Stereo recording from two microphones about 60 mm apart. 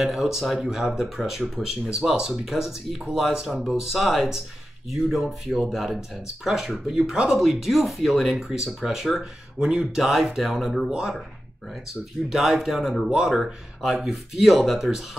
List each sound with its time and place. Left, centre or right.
0.0 s speech: centre
3.9 s speech: centre